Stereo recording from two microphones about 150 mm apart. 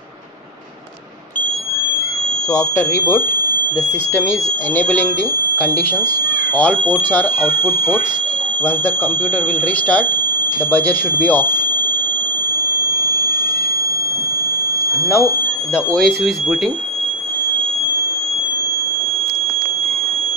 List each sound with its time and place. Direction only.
2.5 s speech: 20° left (ahead or behind)
10.7 s speech: 10° left (ahead or behind)
15.0 s speech: 15° left (ahead or behind)